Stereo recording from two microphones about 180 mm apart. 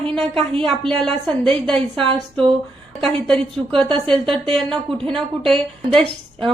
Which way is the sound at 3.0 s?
5° left (ahead or behind).